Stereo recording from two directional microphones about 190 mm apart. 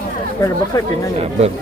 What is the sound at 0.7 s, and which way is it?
Speech, 20° left (ahead or behind).